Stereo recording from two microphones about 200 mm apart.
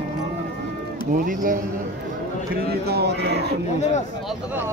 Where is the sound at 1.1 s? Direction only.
45° right (ahead or behind).